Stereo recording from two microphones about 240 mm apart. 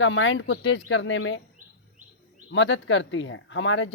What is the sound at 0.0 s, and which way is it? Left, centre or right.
A woman's voice, left.